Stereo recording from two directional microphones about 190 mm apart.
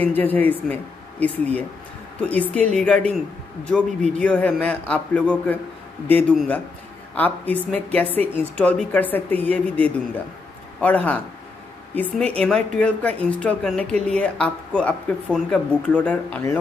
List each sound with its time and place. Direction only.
0.0 s a woman's voice: 10° left (ahead or behind)